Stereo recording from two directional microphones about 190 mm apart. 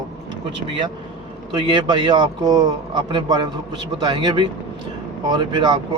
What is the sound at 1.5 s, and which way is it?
Speech, 25° right (ahead or behind).